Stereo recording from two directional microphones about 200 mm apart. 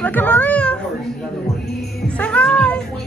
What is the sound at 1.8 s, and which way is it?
Speech, 5° left (ahead or behind).